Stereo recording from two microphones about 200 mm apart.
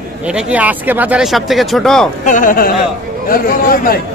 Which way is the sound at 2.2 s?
40° left (ahead or behind).